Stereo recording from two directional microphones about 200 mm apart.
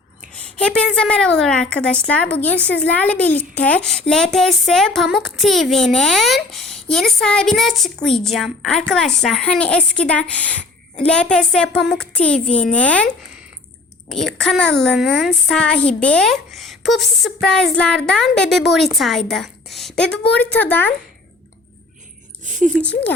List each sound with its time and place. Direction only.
0.3 s a woman's voice: 5° left (ahead or behind)
14.1 s a woman's voice: centre (ahead or behind)
22.4 s a sound: 40° right (ahead or behind)